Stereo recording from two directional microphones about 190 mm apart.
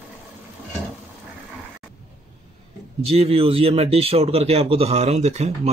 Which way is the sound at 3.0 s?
30° right (ahead or behind).